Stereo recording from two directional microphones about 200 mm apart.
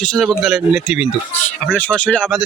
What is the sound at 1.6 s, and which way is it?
Speech, 5° left (ahead or behind).